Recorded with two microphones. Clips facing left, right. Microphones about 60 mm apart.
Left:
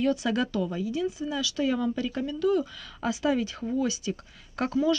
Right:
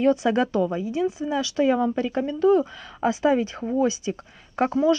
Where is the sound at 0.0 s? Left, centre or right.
Right.